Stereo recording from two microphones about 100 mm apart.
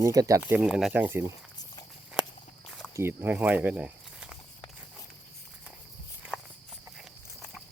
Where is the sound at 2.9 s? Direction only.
25° right (ahead or behind).